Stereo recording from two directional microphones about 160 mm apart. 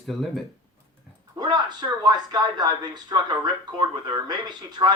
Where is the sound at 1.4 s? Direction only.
25° right (ahead or behind).